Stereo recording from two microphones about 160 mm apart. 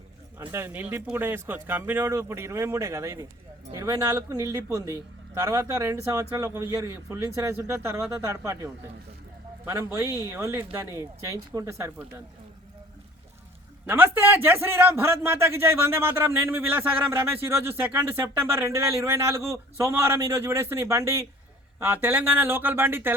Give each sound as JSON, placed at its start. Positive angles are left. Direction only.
{"t": 0.3, "sound": "a man's voice", "side_deg": -15}
{"t": 13.8, "sound": "a man's voice", "side_deg": -10}